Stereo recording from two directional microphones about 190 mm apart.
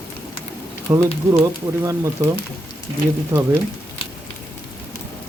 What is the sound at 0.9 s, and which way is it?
Speech, 20° right (ahead or behind).